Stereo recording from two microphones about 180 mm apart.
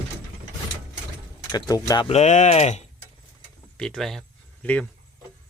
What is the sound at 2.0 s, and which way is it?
Speech, 35° left (ahead or behind).